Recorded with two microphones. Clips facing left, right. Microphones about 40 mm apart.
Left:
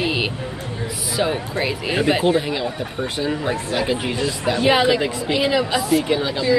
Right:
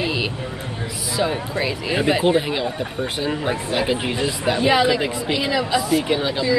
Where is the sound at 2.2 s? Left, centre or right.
Centre.